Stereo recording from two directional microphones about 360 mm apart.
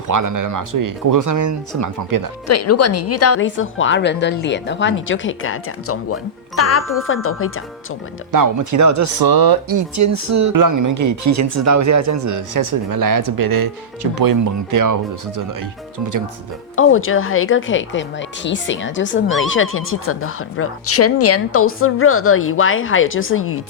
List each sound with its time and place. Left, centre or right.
0.1 s speech: right
2.5 s speech: left
8.3 s speech: right
9.1 s speech: right
16.7 s speech: left